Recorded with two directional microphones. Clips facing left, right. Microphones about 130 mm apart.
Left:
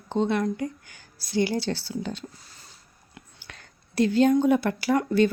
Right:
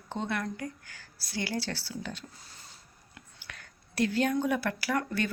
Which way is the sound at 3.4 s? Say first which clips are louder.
Left 1 dB; 25° left (ahead or behind).